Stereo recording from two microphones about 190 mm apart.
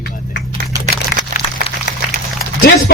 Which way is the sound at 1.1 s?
50° left (ahead or behind).